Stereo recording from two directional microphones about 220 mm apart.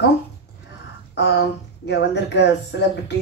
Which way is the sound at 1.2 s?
50° left (ahead or behind).